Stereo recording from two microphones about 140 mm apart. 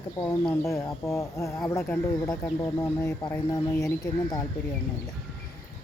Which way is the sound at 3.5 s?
20° left (ahead or behind).